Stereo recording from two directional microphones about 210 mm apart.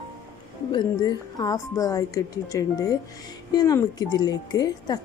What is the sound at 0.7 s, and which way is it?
A woman's voice, 20° left (ahead or behind).